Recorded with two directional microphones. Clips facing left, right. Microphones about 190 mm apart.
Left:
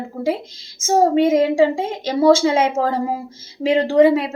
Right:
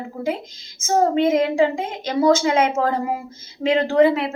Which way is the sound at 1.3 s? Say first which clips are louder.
Left 3 dB; 30° left (ahead or behind).